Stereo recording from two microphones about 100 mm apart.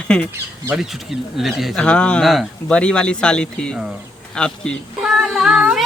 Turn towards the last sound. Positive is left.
turn(degrees=-5)  # may be behind; listen again after turning